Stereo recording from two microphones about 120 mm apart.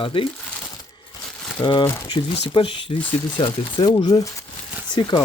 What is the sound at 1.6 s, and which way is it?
Speech, 40° left (ahead or behind).